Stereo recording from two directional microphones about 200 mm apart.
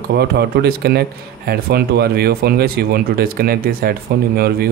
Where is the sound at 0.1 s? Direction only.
55° right (ahead or behind).